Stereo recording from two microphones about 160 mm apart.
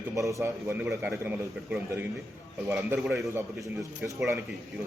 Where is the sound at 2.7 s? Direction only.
15° right (ahead or behind).